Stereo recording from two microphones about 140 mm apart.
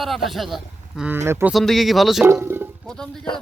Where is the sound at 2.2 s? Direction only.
15° right (ahead or behind).